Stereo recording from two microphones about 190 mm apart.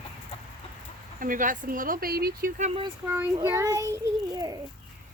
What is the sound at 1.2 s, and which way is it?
Speech, 45° right (ahead or behind).